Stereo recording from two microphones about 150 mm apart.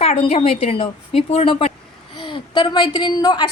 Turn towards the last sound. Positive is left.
turn(degrees=35)  # may be behind; listen again after turning